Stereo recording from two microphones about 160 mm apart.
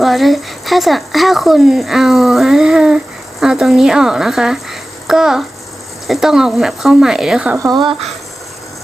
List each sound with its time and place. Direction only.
0.0 s speech: centre (ahead or behind)
7.6 s speech: 25° right (ahead or behind)